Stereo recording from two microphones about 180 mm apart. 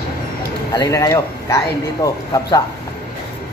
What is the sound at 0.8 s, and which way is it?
Speech, 20° left (ahead or behind).